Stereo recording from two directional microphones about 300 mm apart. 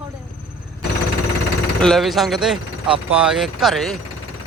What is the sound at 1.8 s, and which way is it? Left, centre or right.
Speech, centre.